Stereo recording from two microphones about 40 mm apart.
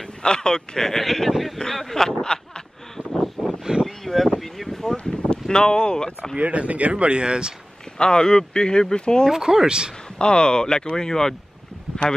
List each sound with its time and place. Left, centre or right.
0.2 s speech: left
0.8 s speech: centre
3.0 s a sound: right
3.4 s a sound: centre
4.9 s a sound: left
6.3 s speech: right
8.0 s speech: left
9.3 s speech: centre
10.1 s speech: left